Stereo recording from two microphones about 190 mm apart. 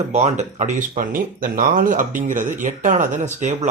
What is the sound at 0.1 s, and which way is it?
Speech, 35° right (ahead or behind).